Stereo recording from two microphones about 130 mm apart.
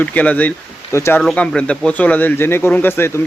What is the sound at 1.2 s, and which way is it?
Speech, 10° left (ahead or behind).